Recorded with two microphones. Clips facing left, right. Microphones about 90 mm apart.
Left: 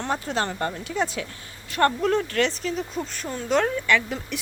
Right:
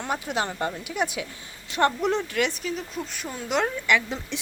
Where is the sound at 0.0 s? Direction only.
10° right (ahead or behind).